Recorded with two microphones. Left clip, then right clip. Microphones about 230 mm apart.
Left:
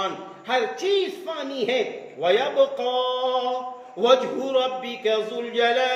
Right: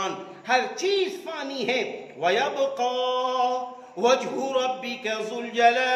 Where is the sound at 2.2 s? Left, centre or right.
Right.